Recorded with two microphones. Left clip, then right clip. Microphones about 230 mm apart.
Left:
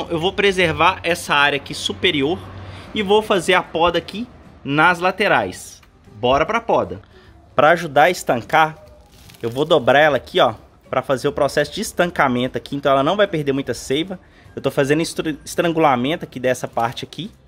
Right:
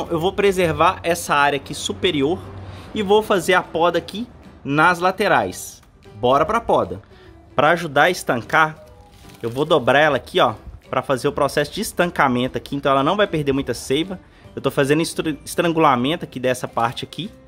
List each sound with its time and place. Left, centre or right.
0.0 s a man's voice: centre